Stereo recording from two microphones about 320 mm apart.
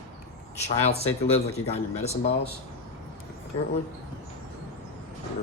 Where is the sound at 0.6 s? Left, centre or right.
Centre.